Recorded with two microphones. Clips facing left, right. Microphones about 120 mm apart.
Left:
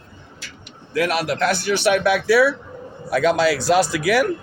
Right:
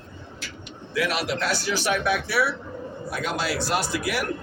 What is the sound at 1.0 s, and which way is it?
Speech, 50° left (ahead or behind).